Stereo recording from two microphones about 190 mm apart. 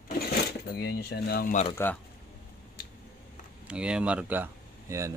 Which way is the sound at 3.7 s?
5° right (ahead or behind).